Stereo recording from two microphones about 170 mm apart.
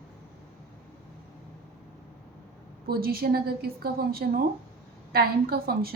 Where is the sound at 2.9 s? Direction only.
65° right (ahead or behind).